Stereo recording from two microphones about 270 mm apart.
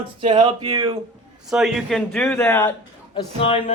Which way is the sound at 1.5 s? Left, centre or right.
Centre.